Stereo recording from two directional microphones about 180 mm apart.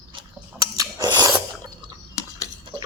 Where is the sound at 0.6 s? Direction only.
20° right (ahead or behind).